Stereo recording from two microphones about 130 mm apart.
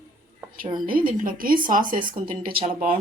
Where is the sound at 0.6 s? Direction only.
35° right (ahead or behind).